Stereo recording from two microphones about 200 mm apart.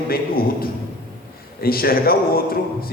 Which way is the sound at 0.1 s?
50° left (ahead or behind).